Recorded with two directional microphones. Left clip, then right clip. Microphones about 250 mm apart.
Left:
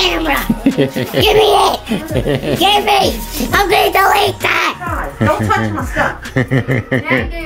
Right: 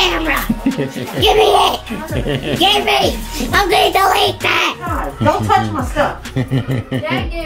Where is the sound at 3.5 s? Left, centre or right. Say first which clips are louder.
Left 1 dB; centre.